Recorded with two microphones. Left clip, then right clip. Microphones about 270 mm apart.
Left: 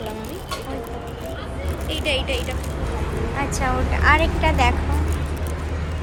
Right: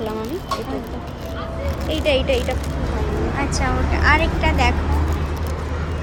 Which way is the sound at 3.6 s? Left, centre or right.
Centre.